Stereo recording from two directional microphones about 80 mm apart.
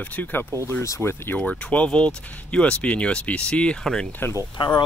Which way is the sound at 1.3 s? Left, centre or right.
Centre.